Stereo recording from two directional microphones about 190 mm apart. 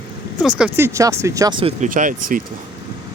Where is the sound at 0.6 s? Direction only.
15° right (ahead or behind).